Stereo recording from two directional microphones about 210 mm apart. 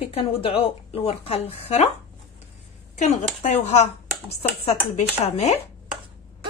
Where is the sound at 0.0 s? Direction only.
30° left (ahead or behind).